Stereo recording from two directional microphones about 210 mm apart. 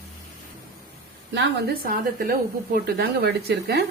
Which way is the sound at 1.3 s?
45° right (ahead or behind).